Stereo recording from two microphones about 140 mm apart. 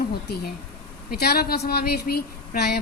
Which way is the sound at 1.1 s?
90° left.